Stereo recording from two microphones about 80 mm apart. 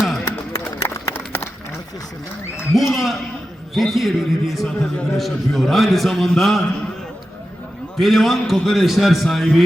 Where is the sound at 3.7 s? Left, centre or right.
Centre.